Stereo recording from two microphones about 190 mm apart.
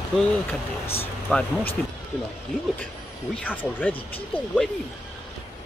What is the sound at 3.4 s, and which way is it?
Speech, 10° left (ahead or behind).